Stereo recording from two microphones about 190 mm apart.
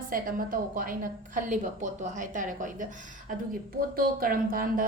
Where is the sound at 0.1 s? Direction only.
45° right (ahead or behind).